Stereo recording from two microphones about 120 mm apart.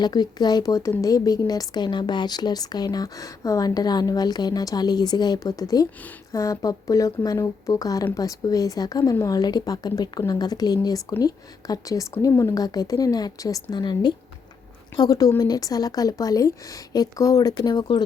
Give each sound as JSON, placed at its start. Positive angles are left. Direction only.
{"t": 0.0, "sound": "a woman's voice", "side_deg": 35}